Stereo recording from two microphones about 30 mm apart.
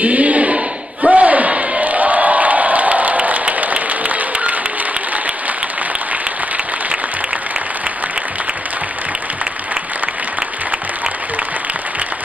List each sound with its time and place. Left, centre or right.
0.0 s crowd: right